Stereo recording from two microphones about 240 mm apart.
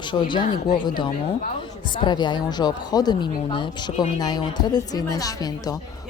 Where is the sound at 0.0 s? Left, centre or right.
Centre.